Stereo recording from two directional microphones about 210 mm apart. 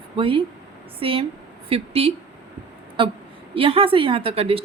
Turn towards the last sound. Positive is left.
turn(degrees=-25)  # may be behind; listen again after turning